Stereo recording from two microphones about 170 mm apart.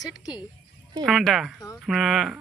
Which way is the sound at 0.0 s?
20° left (ahead or behind).